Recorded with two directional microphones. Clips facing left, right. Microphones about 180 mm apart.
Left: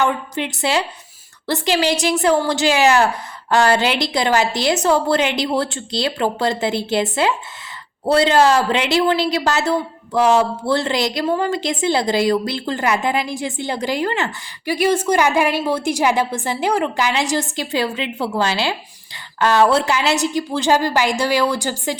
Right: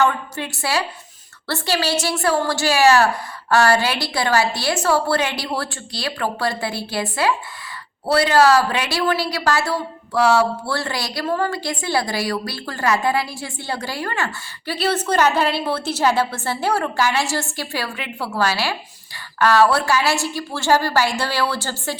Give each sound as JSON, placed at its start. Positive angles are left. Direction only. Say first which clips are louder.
{"t": 0.0, "sound": "a woman's voice", "louder": "even", "side_deg": 15}